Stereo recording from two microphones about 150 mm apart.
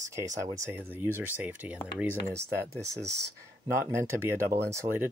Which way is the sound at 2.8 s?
20° right (ahead or behind).